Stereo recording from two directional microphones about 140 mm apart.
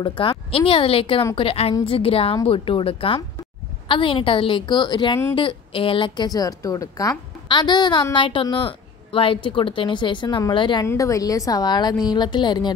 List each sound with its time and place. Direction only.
0.0 s a woman's voice: 40° left (ahead or behind)
10.9 s a woman's voice: 25° left (ahead or behind)